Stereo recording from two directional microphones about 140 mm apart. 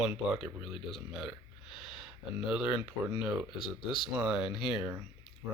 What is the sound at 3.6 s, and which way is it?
Speech, 35° left (ahead or behind).